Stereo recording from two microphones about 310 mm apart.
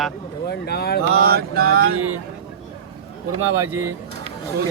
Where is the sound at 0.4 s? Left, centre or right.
Left.